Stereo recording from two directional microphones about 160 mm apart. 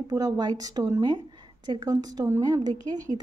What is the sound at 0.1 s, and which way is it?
A woman's voice, 25° right (ahead or behind).